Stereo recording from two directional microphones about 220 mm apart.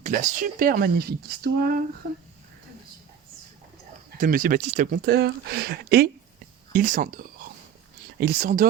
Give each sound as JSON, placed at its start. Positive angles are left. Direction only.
{"t": 0.0, "sound": "speech", "side_deg": -35}
{"t": 4.2, "sound": "speech", "side_deg": -40}